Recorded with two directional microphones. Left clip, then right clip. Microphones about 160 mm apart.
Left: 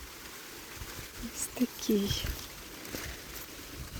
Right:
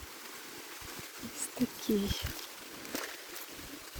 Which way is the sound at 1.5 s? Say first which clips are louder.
Left 2 dB; 20° left (ahead or behind).